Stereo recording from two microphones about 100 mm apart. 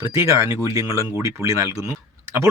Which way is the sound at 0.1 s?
30° right (ahead or behind).